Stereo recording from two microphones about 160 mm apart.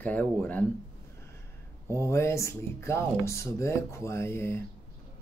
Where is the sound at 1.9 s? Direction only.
15° left (ahead or behind).